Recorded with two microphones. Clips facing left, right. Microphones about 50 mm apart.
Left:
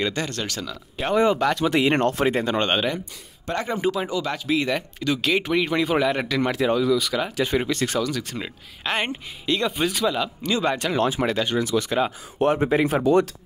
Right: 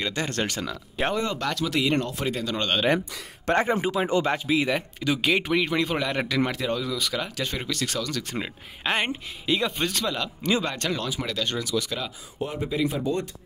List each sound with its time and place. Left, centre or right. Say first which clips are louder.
0.3 s speech: right 2 dB; right
1.5 s speech: left 5 dB; left
2.0 s speech: left 7 dB; left
2.2 s speech: left 6 dB; left
3.5 s speech: right 5 dB; right
3.8 s speech: left 2 dB; centre
4.1 s speech: right 3 dB; right
4.5 s speech: left 1 dB; centre
7.2 s speech: left 7 dB; centre
8.2 s speech: even; centre
11.0 s speech: left 8 dB; left
12.4 s speech: left 8 dB; left